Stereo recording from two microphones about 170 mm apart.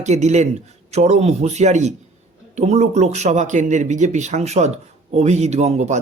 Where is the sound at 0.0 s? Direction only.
40° right (ahead or behind).